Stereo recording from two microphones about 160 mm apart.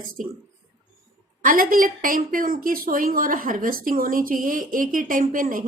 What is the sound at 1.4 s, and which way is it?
A woman's voice, 60° right (ahead or behind).